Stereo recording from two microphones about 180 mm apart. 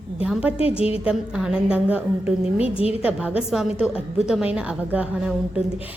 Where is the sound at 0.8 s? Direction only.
35° left (ahead or behind).